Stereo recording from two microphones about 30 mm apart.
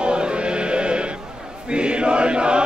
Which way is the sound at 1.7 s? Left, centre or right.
Right.